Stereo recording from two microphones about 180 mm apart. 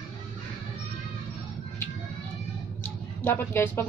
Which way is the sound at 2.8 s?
10° left (ahead or behind).